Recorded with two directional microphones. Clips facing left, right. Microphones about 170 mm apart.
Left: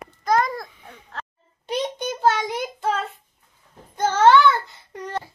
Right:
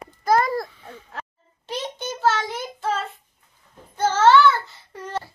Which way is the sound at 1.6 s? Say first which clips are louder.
Left 4 dB; 15° left (ahead or behind).